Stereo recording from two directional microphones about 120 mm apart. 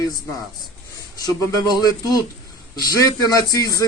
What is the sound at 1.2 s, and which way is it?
A man's voice, 30° left (ahead or behind).